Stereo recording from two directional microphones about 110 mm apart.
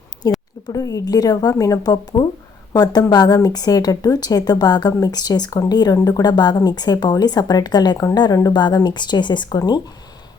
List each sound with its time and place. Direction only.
0.2 s a woman's voice: 35° left (ahead or behind)